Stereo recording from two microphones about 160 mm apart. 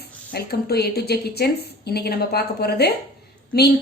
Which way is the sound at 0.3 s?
80° left.